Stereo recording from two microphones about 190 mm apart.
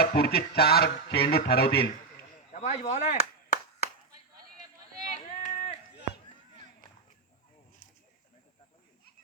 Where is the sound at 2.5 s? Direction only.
35° left (ahead or behind).